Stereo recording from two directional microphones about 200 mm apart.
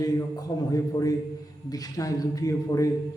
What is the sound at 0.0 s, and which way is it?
A man's voice, 15° left (ahead or behind).